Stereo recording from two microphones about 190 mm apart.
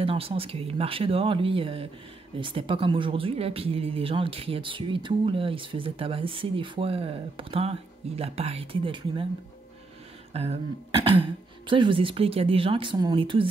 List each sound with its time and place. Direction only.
0.0 s speech: 30° right (ahead or behind)
10.3 s speech: 30° right (ahead or behind)